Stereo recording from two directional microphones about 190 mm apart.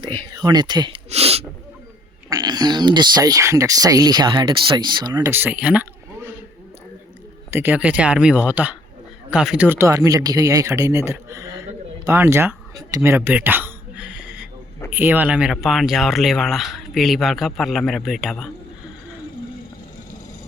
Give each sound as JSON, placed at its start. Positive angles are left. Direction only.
{"t": 0.3, "sound": "speech", "side_deg": -20}
{"t": 2.3, "sound": "speech", "side_deg": -20}
{"t": 7.5, "sound": "speech", "side_deg": -10}
{"t": 12.0, "sound": "a sound", "side_deg": -15}
{"t": 14.8, "sound": "speech", "side_deg": -10}